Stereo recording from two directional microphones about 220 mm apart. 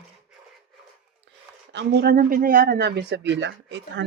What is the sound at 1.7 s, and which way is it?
Speech, 45° right (ahead or behind).